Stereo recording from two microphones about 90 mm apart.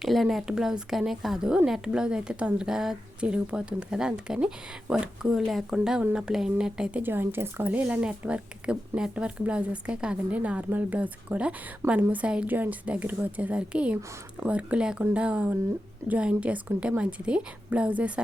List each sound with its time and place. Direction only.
0.0 s speech: centre (ahead or behind)
7.0 s speech: 25° right (ahead or behind)